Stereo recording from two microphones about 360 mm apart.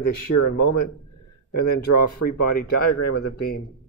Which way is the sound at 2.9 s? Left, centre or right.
Left.